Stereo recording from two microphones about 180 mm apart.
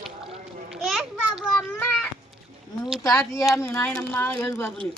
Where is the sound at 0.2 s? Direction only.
30° right (ahead or behind).